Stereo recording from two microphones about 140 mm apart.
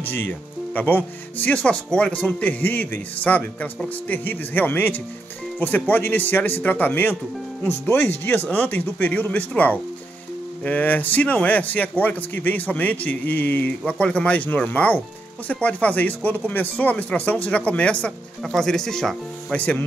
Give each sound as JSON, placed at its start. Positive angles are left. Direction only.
{"t": 0.0, "sound": "speech", "side_deg": 15}